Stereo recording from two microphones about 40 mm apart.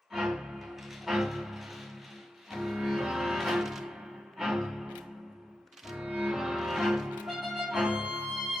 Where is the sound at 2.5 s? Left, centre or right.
Centre.